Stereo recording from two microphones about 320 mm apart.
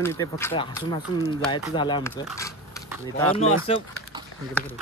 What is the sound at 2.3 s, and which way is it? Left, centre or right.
Dog, centre.